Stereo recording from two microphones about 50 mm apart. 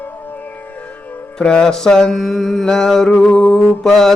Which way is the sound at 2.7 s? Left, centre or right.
Centre.